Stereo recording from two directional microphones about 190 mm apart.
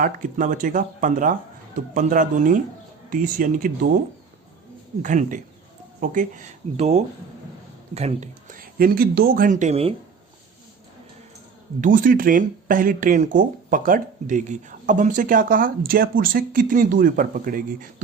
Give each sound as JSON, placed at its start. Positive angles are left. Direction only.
{"t": 0.0, "sound": "speech", "side_deg": -45}
{"t": 5.0, "sound": "speech", "side_deg": -40}
{"t": 11.8, "sound": "speech", "side_deg": -45}